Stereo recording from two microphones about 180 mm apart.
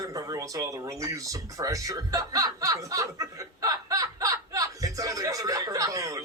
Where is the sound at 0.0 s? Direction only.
20° right (ahead or behind).